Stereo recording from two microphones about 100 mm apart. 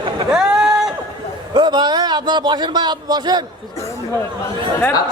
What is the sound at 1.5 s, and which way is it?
A man's voice, 50° right (ahead or behind).